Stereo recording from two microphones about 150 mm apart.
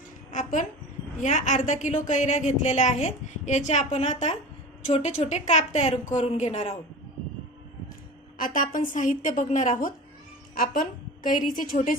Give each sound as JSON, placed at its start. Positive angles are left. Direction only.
{"t": 0.3, "sound": "a woman's voice", "side_deg": 55}
{"t": 8.4, "sound": "a woman's voice", "side_deg": 65}
{"t": 10.5, "sound": "a woman's voice", "side_deg": 70}